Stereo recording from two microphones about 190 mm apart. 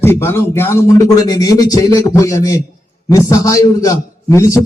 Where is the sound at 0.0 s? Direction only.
10° left (ahead or behind).